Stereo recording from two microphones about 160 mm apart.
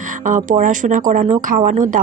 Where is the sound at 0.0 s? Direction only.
55° right (ahead or behind).